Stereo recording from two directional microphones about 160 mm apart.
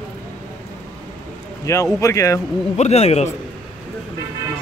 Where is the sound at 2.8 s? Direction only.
40° left (ahead or behind).